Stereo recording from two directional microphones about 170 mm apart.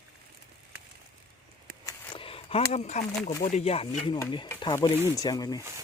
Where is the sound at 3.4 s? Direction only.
40° left (ahead or behind); by 5.6 s 20° left (ahead or behind).